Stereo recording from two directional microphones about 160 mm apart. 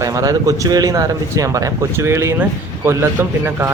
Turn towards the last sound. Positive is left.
turn(degrees=-10)  # may be behind; listen again after turning